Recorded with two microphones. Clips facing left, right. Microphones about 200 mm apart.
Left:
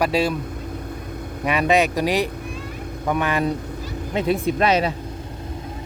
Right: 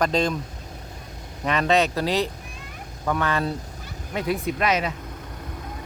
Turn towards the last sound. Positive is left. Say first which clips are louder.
# left 5 dB
turn(degrees=30)  # may be behind; listen again after turning